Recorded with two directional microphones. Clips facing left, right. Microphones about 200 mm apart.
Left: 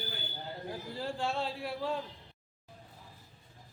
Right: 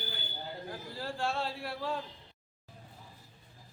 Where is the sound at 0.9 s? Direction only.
20° left (ahead or behind).